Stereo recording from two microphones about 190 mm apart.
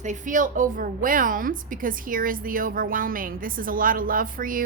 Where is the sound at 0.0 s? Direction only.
40° right (ahead or behind).